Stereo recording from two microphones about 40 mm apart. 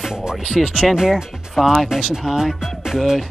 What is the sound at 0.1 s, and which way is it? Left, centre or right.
Speech, centre.